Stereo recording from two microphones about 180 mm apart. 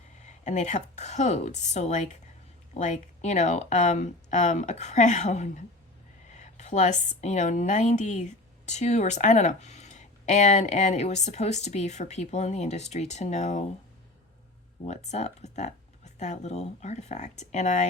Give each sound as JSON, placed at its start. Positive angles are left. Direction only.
{"t": 0.2, "sound": "a woman's voice", "side_deg": 40}
{"t": 14.8, "sound": "speech", "side_deg": 40}